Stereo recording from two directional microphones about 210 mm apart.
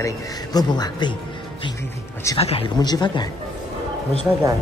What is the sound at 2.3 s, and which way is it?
Speech, 25° left (ahead or behind).